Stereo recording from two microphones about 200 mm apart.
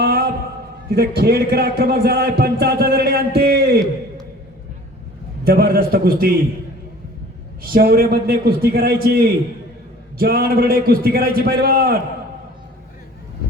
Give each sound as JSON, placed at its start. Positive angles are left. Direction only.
{"t": 0.0, "sound": "a sound", "side_deg": -50}
{"t": 0.9, "sound": "a man's voice", "side_deg": -55}
{"t": 5.5, "sound": "a man's voice", "side_deg": -50}
{"t": 7.6, "sound": "a man's voice", "side_deg": -50}